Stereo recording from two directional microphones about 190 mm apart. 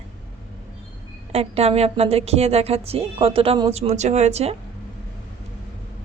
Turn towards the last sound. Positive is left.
turn(degrees=-35)  # may be behind; listen again after turning